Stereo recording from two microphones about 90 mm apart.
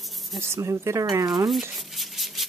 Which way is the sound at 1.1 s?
45° right (ahead or behind).